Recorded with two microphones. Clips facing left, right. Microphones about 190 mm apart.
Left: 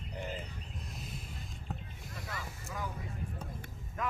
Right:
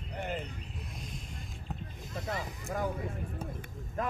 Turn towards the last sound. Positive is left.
turn(degrees=-50)  # may be behind; listen again after turning